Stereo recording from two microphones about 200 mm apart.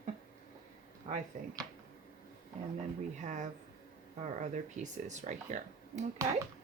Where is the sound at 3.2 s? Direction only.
35° right (ahead or behind).